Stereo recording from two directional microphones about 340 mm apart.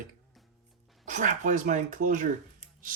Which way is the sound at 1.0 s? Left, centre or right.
Right.